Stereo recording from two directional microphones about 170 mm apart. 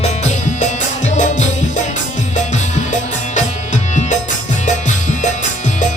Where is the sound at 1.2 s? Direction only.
45° left (ahead or behind).